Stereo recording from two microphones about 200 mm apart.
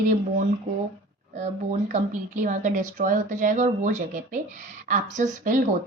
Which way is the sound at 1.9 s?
40° right (ahead or behind).